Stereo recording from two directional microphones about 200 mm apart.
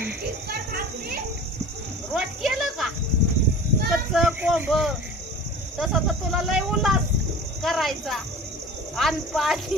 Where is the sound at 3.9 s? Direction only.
5° right (ahead or behind).